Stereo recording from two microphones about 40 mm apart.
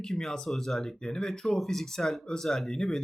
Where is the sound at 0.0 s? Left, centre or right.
Centre.